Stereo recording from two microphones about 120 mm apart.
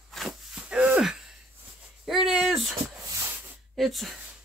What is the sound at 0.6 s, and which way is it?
Wheeze, 10° right (ahead or behind).